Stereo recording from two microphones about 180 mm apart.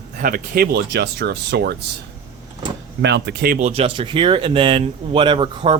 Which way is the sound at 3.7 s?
30° right (ahead or behind).